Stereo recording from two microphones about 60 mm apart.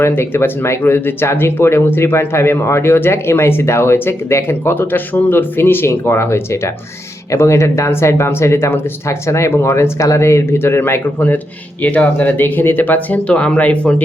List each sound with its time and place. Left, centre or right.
0.0 s speech: left
10.0 s speech: left
11.8 s speech: left